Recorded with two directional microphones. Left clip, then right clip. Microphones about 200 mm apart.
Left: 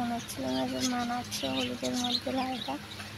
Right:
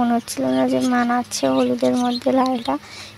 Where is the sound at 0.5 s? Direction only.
45° right (ahead or behind).